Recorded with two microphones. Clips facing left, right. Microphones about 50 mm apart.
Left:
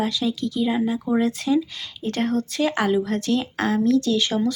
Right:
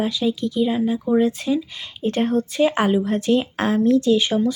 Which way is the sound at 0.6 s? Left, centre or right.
Centre.